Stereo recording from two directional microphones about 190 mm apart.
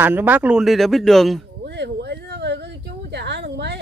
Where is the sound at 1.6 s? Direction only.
65° right (ahead or behind).